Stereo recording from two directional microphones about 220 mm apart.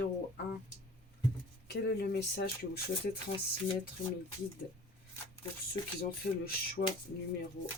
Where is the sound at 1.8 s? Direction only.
50° left (ahead or behind).